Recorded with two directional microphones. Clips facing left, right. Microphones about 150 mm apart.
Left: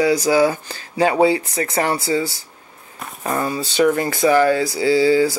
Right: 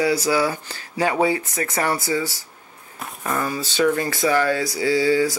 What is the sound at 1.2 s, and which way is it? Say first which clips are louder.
Speech: left 4 dB; 35° left (ahead or behind).